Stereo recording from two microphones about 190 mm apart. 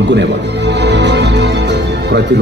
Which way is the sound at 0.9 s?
65° right (ahead or behind).